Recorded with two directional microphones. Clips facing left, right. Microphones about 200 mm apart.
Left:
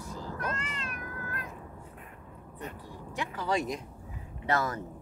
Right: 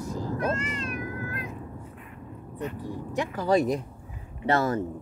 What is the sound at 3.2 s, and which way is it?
Speech, 40° right (ahead or behind).